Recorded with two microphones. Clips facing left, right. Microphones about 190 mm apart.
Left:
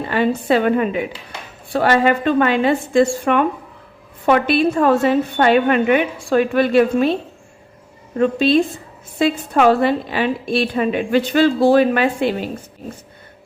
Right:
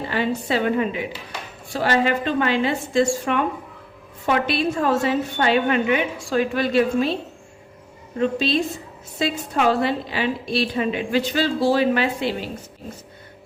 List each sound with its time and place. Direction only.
0.1 s a woman's voice: 55° left (ahead or behind)
8.2 s a woman's voice: 55° left (ahead or behind)